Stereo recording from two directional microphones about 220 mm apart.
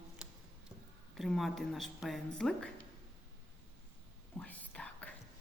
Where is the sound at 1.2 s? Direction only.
Centre (ahead or behind).